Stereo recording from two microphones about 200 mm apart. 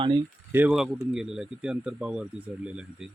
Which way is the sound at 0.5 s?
5° right (ahead or behind).